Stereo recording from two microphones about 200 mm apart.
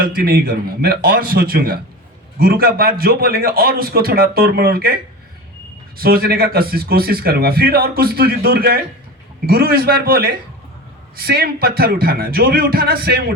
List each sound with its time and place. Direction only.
0.0 s a man's voice: 45° right (ahead or behind)
6.0 s a man's voice: 50° right (ahead or behind)